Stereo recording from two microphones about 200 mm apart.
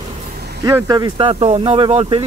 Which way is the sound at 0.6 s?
20° right (ahead or behind).